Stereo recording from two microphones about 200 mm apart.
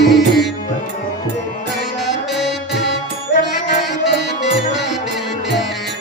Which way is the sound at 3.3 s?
65° left (ahead or behind).